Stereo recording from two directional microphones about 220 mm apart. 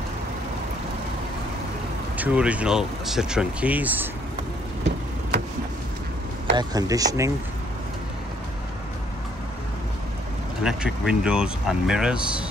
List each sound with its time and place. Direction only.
2.1 s speech: 5° right (ahead or behind)
6.5 s speech: 20° right (ahead or behind)
10.6 s speech: 5° right (ahead or behind)